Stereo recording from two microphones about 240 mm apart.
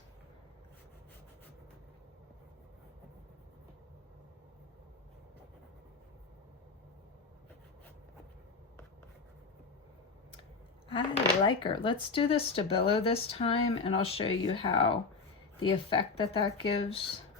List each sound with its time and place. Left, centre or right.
11.4 s speech: centre